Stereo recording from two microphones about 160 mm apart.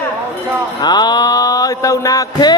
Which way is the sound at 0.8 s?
25° left (ahead or behind).